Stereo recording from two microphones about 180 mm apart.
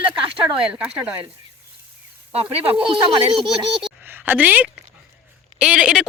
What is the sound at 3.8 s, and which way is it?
A woman's voice, 5° right (ahead or behind).